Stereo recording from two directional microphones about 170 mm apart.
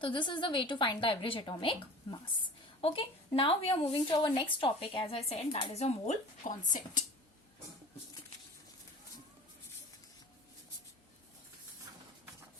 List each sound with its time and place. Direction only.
0.0 s a woman's voice: 30° left (ahead or behind); by 7.0 s 50° left (ahead or behind)